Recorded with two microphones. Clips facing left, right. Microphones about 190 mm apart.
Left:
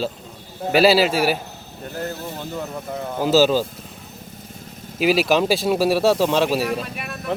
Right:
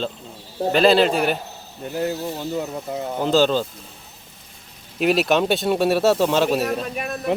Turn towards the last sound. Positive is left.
turn(degrees=-45)  # may be behind; listen again after turning